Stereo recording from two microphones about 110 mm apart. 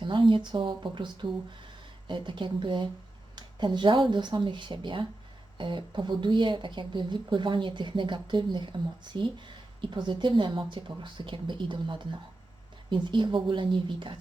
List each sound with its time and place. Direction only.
0.0 s speech: 50° right (ahead or behind)